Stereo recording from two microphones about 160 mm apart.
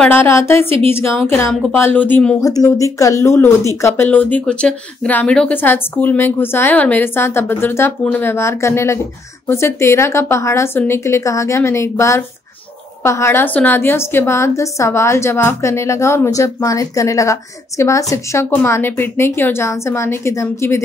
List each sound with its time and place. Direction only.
0.0 s a woman's voice: 10° left (ahead or behind)
0.6 s a woman's voice: 35° right (ahead or behind)
0.8 s a woman's voice: 15° left (ahead or behind)
2.4 s a woman's voice: 20° left (ahead or behind)